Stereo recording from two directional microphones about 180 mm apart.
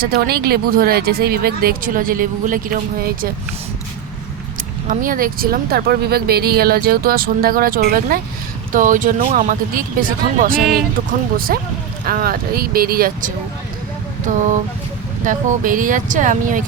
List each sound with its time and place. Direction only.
0.0 s speech: 60° right (ahead or behind)
4.5 s speech: 50° right (ahead or behind)
15.2 s speech: 50° right (ahead or behind)